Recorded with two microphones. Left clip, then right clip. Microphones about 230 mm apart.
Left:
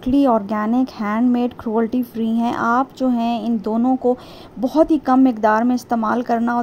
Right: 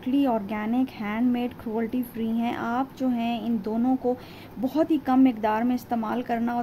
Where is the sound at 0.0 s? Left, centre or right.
Left.